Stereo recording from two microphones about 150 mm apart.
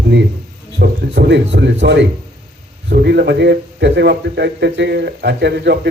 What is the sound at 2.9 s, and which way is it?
A man's voice, 90° right.